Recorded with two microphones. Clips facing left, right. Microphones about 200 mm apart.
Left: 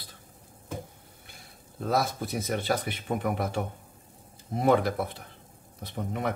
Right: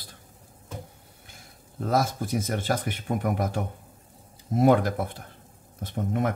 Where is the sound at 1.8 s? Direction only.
50° right (ahead or behind).